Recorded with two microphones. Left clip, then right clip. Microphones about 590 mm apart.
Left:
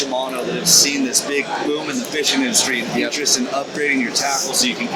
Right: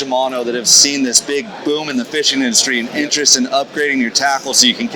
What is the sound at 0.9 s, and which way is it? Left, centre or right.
Speech, right.